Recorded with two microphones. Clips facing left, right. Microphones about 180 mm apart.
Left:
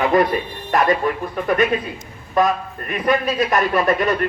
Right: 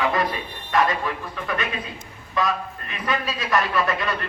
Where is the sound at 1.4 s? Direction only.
45° left (ahead or behind).